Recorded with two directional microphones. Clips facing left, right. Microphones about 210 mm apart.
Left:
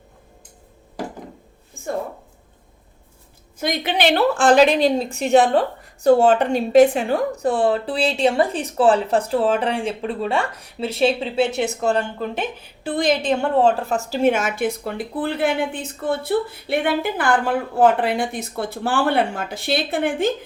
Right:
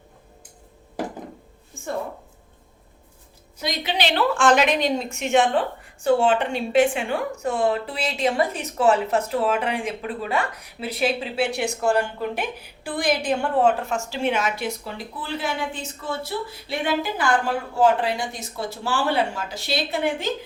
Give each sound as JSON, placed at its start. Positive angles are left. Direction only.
{"t": 3.6, "sound": "a woman's voice", "side_deg": 55}